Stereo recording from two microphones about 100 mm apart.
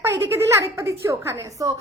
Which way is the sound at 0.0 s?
25° right (ahead or behind).